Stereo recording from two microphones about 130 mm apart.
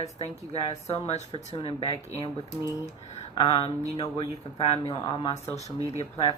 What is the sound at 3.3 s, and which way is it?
Speech, 45° left (ahead or behind).